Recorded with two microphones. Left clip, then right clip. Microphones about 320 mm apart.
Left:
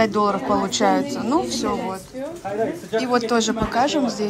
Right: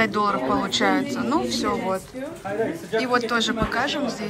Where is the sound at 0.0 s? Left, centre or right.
Centre.